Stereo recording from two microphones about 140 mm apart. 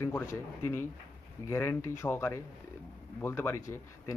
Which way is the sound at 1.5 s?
20° left (ahead or behind).